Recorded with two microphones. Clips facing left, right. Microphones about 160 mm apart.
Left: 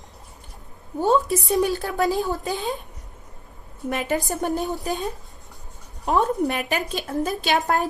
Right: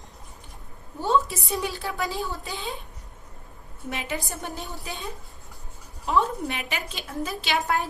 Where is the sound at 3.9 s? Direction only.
50° left (ahead or behind).